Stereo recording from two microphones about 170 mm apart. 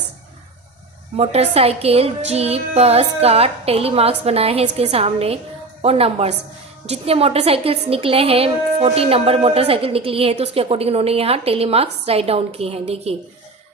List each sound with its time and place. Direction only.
1.1 s a woman's voice: 35° right (ahead or behind)